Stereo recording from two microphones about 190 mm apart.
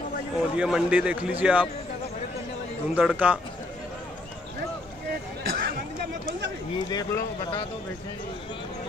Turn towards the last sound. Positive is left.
turn(degrees=20)  # may be behind; listen again after turning